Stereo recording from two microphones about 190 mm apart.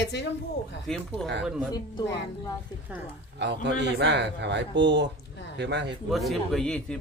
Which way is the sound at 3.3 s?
65° right (ahead or behind).